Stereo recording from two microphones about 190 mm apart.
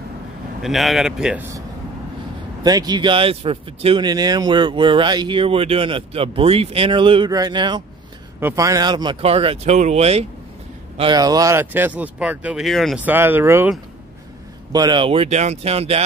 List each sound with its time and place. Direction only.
0.6 s speech: centre (ahead or behind)
2.6 s speech: 20° right (ahead or behind)
11.0 s speech: 20° right (ahead or behind); by 13.0 s centre (ahead or behind)
13.0 s speech: 10° right (ahead or behind); by 16.0 s 30° right (ahead or behind)